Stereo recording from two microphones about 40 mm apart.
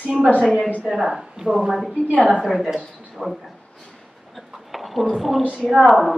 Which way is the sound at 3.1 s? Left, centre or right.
Centre.